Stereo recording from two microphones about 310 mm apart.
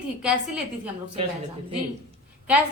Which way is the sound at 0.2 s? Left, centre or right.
Centre.